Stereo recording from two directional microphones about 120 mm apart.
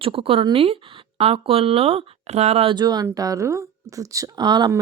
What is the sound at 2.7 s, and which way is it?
A woman's voice, 35° right (ahead or behind).